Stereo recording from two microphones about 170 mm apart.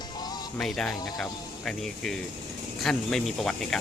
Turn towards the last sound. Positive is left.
turn(degrees=5)  # may be behind; listen again after turning